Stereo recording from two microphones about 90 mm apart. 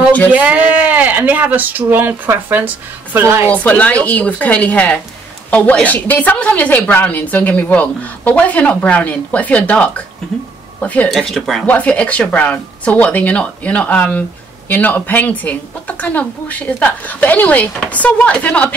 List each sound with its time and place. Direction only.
0.3 s speech: 15° right (ahead or behind)
3.4 s a woman's voice: 15° left (ahead or behind)
11.1 s speech: 5° left (ahead or behind)
11.6 s a woman's voice: 15° left (ahead or behind)